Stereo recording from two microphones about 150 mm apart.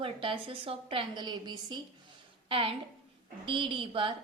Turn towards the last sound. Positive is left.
turn(degrees=-35)  # may be behind; listen again after turning